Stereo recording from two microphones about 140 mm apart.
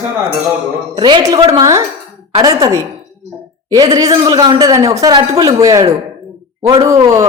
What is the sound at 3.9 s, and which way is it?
Speech, 30° right (ahead or behind).